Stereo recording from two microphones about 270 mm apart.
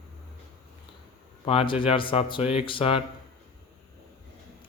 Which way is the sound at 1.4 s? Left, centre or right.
Left.